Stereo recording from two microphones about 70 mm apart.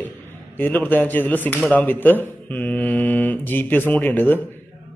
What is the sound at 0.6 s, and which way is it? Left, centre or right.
A man's voice, left.